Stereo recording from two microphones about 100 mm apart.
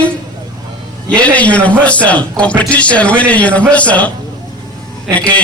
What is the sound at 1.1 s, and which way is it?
A man's voice, 15° left (ahead or behind).